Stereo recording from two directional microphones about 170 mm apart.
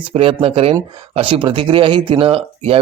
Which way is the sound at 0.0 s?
30° right (ahead or behind).